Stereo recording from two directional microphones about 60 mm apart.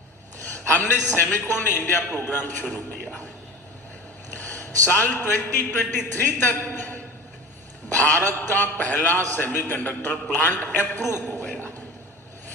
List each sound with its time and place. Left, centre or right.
0.7 s a man's voice: left
4.5 s a man's voice: left